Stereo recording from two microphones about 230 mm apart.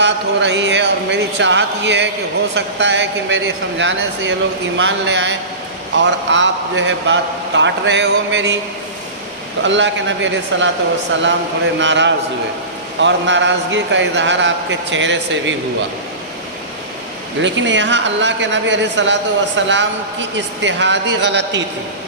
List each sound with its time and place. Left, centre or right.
0.0 s a man's voice: right
9.6 s a man's voice: right
11.8 s a man's voice: right
17.4 s a man's voice: right